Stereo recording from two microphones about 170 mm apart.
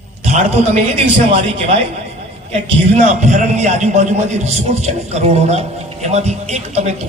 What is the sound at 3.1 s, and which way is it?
A man's voice, 45° right (ahead or behind).